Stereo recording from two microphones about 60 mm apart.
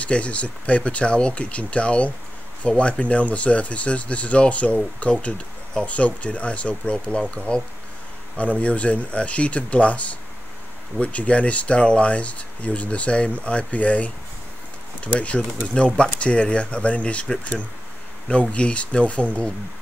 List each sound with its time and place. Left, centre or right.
0.0 s speech: left
18.5 s speech: centre